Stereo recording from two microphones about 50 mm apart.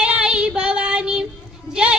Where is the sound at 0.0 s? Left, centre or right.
Centre.